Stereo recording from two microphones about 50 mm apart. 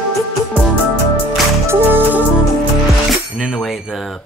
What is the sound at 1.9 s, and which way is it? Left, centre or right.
Music, right.